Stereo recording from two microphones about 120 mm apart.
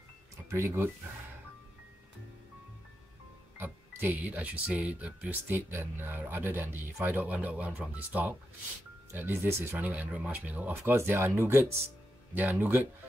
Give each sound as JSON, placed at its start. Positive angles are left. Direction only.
{"t": 0.5, "sound": "speech", "side_deg": -20}
{"t": 3.5, "sound": "speech", "side_deg": -15}